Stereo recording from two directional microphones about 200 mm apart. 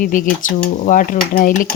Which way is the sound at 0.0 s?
40° left (ahead or behind).